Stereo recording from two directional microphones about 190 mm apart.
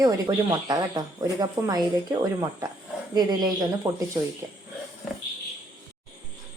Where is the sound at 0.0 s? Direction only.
20° right (ahead or behind).